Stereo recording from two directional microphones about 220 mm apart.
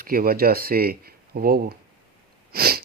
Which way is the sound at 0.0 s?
40° right (ahead or behind).